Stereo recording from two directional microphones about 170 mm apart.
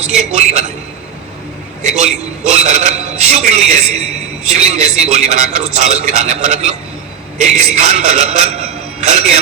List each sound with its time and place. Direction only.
0.2 s a man's voice: 40° right (ahead or behind)
1.8 s a man's voice: 40° right (ahead or behind)